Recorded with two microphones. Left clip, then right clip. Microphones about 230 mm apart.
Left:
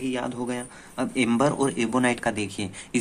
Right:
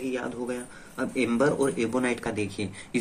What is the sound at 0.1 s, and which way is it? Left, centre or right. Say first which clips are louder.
A man's voice: left 2 dB; left.